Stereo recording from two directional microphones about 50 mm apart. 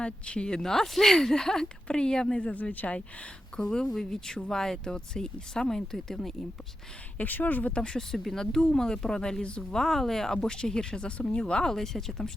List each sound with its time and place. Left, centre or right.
0.0 s speech: left
2.4 s speech: left
3.6 s speech: centre
7.2 s speech: left
7.8 s speech: centre